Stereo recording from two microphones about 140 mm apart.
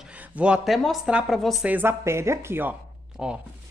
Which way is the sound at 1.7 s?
15° right (ahead or behind).